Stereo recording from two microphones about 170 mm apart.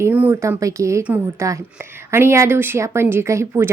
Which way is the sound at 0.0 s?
10° right (ahead or behind).